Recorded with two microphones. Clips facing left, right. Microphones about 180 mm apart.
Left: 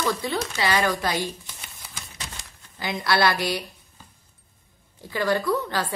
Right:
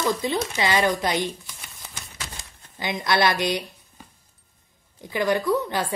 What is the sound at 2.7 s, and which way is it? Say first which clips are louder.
Speech: right 1 dB; 20° right (ahead or behind).